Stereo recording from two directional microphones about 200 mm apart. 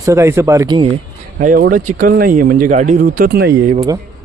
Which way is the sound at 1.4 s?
45° right (ahead or behind).